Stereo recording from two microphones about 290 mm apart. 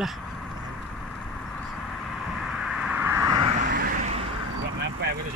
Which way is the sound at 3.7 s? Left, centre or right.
Right.